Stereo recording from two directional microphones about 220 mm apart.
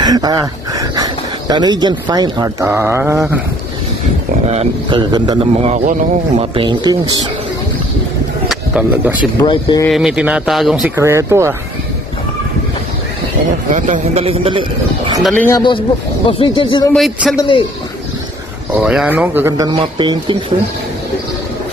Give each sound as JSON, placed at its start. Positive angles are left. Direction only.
{"t": 0.0, "sound": "speech", "side_deg": -15}
{"t": 4.5, "sound": "a man's voice", "side_deg": -25}
{"t": 8.5, "sound": "a sound", "side_deg": -5}
{"t": 9.4, "sound": "speech", "side_deg": 20}
{"t": 9.8, "sound": "speech", "side_deg": 0}
{"t": 11.0, "sound": "speech", "side_deg": -15}
{"t": 13.7, "sound": "a man's voice", "side_deg": -35}
{"t": 15.2, "sound": "speech", "side_deg": 5}
{"t": 16.3, "sound": "speech", "side_deg": 25}
{"t": 16.9, "sound": "speech", "side_deg": 0}
{"t": 17.4, "sound": "speech", "side_deg": 20}
{"t": 18.7, "sound": "speech", "side_deg": -5}